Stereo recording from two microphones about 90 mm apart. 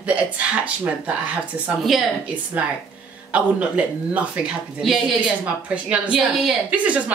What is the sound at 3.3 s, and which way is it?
Speech, 15° right (ahead or behind).